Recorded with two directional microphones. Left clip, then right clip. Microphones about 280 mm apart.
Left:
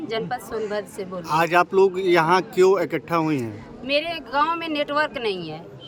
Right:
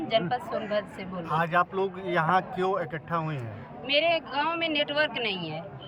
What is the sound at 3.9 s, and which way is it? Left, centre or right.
Speech, centre.